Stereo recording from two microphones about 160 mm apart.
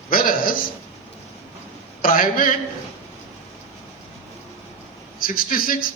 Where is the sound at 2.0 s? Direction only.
60° left (ahead or behind).